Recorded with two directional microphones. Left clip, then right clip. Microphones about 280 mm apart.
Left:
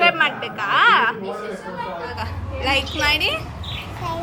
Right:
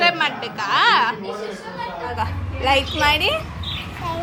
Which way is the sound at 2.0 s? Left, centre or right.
Centre.